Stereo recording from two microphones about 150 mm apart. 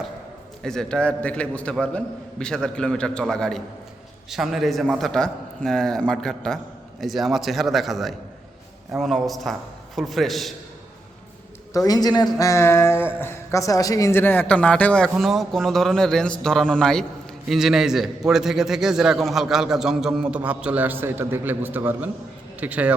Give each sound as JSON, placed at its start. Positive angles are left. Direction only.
{"t": 0.6, "sound": "a man's voice", "side_deg": 5}
{"t": 11.7, "sound": "a man's voice", "side_deg": 25}